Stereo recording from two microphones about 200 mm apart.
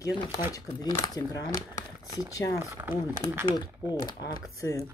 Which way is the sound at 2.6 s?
10° right (ahead or behind).